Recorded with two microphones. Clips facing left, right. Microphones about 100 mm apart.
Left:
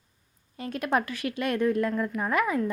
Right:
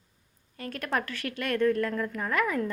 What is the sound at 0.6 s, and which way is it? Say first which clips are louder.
Speech: left 4 dB; 20° left (ahead or behind).